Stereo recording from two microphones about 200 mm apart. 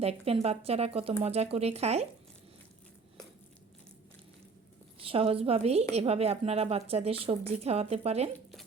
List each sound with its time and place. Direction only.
0.0 s speech: 30° right (ahead or behind)
4.9 s a woman's voice: 30° right (ahead or behind)